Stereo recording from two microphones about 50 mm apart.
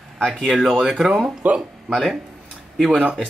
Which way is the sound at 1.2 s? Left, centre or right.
Right.